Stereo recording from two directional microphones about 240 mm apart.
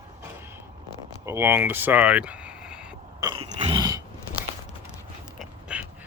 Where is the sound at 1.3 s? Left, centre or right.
Centre.